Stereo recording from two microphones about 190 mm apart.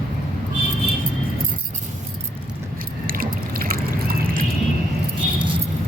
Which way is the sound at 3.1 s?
50° right (ahead or behind).